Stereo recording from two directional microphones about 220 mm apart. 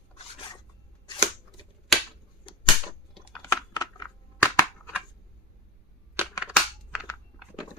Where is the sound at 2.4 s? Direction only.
20° left (ahead or behind).